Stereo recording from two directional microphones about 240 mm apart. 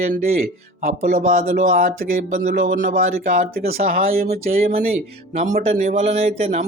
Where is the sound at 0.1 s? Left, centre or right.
Right.